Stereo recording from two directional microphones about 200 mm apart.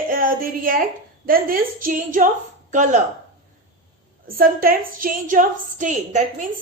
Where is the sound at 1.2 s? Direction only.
45° right (ahead or behind).